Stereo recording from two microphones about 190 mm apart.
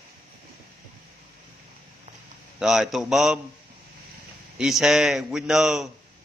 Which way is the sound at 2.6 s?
Centre (ahead or behind).